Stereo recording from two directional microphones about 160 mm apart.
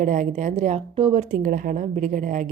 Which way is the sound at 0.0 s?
55° right (ahead or behind).